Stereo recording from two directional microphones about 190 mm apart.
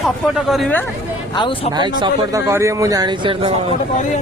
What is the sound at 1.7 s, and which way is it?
Speech, 20° right (ahead or behind).